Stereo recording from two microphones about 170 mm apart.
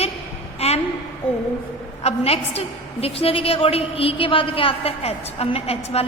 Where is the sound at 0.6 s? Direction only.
35° left (ahead or behind).